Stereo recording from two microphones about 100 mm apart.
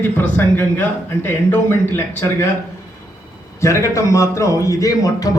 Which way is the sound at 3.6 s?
30° left (ahead or behind).